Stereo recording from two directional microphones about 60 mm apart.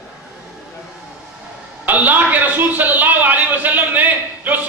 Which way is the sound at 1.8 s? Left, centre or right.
Right.